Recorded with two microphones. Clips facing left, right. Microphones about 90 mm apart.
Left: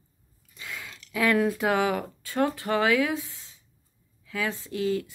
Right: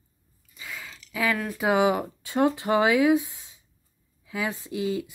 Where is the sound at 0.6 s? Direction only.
Centre (ahead or behind).